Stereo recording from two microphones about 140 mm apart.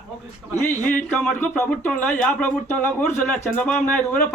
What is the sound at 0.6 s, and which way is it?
Speech, 65° left (ahead or behind).